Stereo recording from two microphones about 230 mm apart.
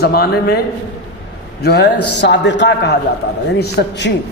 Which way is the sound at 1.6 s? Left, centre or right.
Left.